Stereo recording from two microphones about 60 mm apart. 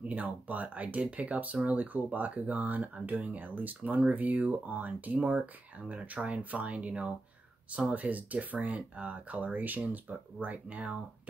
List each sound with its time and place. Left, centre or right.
0.1 s speech: right